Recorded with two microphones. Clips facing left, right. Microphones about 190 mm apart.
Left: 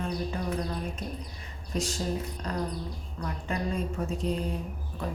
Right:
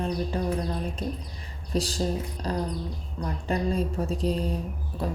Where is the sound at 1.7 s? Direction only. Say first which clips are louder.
Right 3 dB; 35° right (ahead or behind).